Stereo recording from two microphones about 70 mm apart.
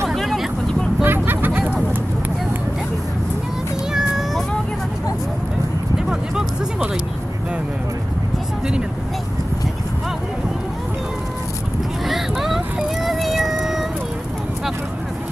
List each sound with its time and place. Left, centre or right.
0.1 s vehicle: centre
1.0 s vehicle: right
6.0 s music: centre
12.1 s music: centre